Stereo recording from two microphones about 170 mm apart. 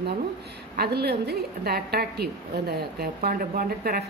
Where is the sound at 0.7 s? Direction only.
70° right (ahead or behind).